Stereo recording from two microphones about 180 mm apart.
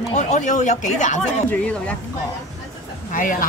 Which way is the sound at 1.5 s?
5° left (ahead or behind).